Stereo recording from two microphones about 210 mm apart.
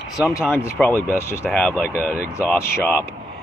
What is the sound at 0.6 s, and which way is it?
Speech, 10° left (ahead or behind).